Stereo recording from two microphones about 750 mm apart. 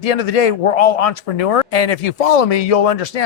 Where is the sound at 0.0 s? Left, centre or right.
Left.